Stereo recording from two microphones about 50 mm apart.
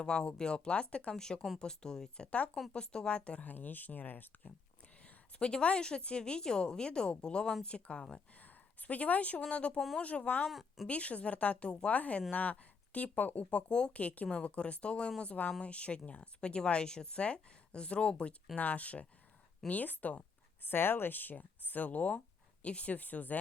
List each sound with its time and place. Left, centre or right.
0.0 s speech: centre
3.5 s speech: left
5.0 s speech: centre
8.4 s a sound: left
9.4 s speech: left
10.5 s speech: centre
10.8 s speech: left